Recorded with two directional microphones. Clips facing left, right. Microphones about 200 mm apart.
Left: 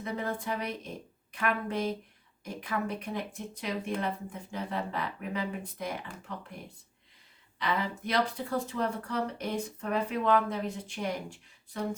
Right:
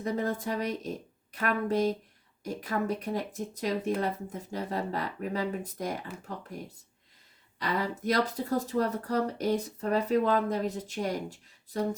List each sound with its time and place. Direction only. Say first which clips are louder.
0.0 s speech: right 4 dB; 40° right (ahead or behind)
7.6 s speech: right 1 dB; 40° right (ahead or behind)